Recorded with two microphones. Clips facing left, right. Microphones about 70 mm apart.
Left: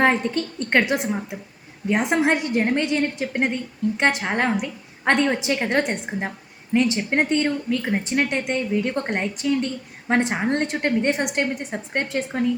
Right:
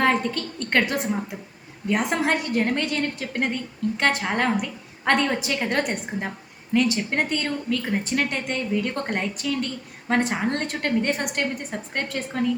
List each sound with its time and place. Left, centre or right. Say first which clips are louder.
0.0 s a woman's voice: left 2 dB; left